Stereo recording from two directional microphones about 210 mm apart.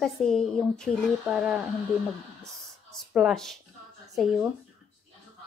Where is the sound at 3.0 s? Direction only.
Centre (ahead or behind).